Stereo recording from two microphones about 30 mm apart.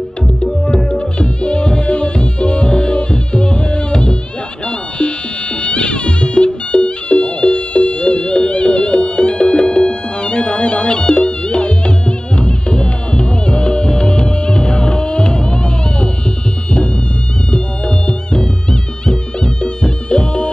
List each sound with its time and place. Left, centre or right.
0.9 s music: left
17.5 s music: left